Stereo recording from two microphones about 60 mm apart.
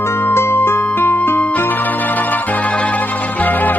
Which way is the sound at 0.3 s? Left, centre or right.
Left.